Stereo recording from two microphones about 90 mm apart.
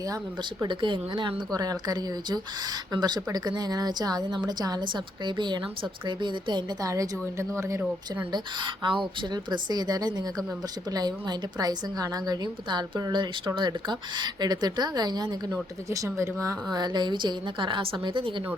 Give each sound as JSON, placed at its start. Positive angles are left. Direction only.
{"t": 0.7, "sound": "a woman's voice", "side_deg": -65}
{"t": 1.5, "sound": "a woman's voice", "side_deg": -45}
{"t": 5.2, "sound": "a woman's voice", "side_deg": -60}
{"t": 6.8, "sound": "a woman's voice", "side_deg": -40}
{"t": 8.3, "sound": "a woman's voice", "side_deg": -60}
{"t": 15.9, "sound": "a woman's voice", "side_deg": -35}
{"t": 16.7, "sound": "a woman's voice", "side_deg": -55}